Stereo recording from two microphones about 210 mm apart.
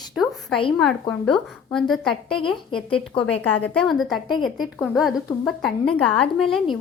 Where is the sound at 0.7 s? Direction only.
Centre (ahead or behind).